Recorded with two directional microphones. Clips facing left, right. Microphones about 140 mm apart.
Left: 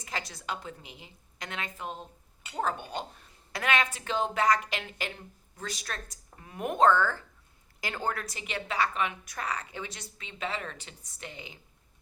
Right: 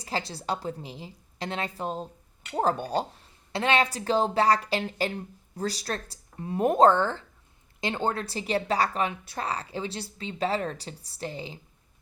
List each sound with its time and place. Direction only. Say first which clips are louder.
0.0 s a woman's voice: right 6 dB; 30° right (ahead or behind)